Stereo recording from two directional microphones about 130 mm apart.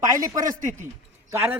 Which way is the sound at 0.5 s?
75° right (ahead or behind).